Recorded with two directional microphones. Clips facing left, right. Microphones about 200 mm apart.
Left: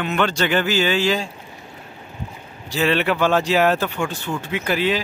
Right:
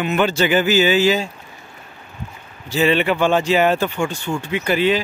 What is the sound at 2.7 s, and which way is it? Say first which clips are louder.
A man's voice: right 3 dB; centre (ahead or behind).